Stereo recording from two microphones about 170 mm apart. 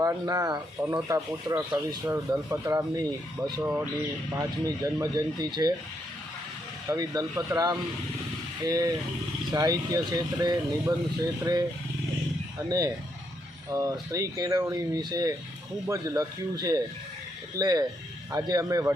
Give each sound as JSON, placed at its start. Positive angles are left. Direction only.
{"t": 0.0, "sound": "speech", "side_deg": -20}
{"t": 6.9, "sound": "speech", "side_deg": -20}
{"t": 12.6, "sound": "speech", "side_deg": -20}